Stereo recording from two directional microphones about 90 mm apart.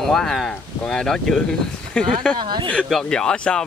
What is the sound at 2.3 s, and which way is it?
Speech, 60° right (ahead or behind).